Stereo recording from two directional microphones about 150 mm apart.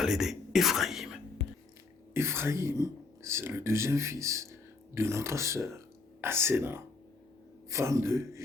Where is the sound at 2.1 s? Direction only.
15° right (ahead or behind).